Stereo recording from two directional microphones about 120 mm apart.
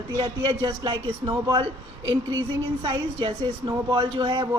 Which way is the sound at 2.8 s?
40° right (ahead or behind).